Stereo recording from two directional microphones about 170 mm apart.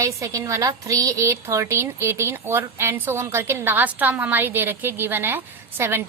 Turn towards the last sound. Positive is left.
turn(degrees=-10)  # may be behind; listen again after turning